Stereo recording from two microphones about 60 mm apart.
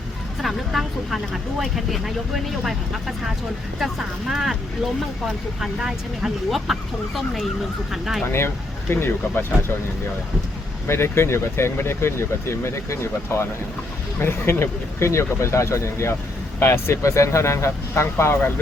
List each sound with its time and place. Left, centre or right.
0.4 s speech: centre
5.5 s speech: centre
8.3 s speech: left
10.8 s speech: left